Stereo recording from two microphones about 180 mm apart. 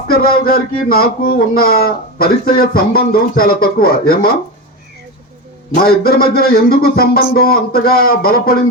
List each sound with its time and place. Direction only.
0.1 s speech: 55° left (ahead or behind)
5.7 s speech: 55° left (ahead or behind)